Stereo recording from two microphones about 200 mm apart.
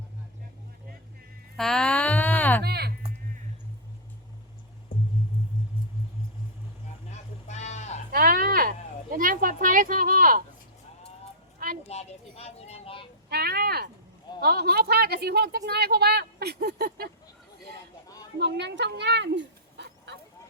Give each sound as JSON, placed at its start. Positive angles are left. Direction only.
{"t": 1.5, "sound": "a sound", "side_deg": 5}
{"t": 2.6, "sound": "a woman's voice", "side_deg": -55}
{"t": 7.1, "sound": "sheep", "side_deg": 35}
{"t": 8.1, "sound": "a sound", "side_deg": -45}
{"t": 11.9, "sound": "speech", "side_deg": 30}
{"t": 13.3, "sound": "a woman's voice", "side_deg": -50}
{"t": 18.3, "sound": "speech", "side_deg": -60}